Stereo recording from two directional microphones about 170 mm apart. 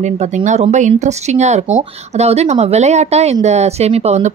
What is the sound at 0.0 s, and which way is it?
Speech, 45° right (ahead or behind).